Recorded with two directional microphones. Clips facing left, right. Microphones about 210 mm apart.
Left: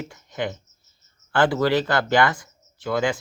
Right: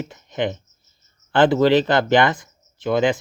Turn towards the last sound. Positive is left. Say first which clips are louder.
# right 5 dB
turn(degrees=-20)  # may be behind; listen again after turning